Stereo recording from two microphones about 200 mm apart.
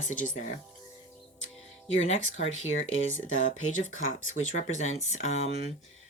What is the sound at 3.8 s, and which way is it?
Speech, 80° left.